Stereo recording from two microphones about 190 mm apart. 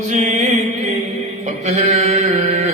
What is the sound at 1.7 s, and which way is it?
Mantra, 35° right (ahead or behind).